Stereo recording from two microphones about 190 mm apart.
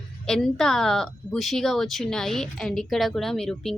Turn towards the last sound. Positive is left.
turn(degrees=0)  # may be behind; listen again after turning